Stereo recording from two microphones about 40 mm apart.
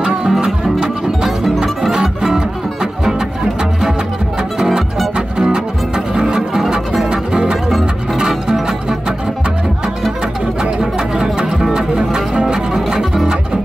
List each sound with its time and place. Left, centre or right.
0.3 s music: centre
4.6 s music: centre
7.1 s music: right
10.6 s music: centre